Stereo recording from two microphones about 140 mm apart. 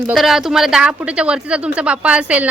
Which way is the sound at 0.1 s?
5° right (ahead or behind).